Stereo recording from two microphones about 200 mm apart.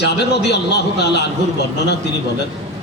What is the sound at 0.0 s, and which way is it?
Speech, 55° left (ahead or behind).